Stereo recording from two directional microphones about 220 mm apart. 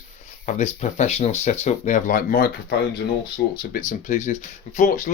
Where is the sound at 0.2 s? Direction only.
35° left (ahead or behind).